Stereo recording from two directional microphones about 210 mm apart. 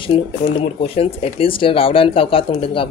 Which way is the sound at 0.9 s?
25° left (ahead or behind).